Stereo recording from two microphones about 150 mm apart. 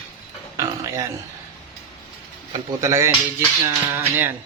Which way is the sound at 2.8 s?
20° right (ahead or behind).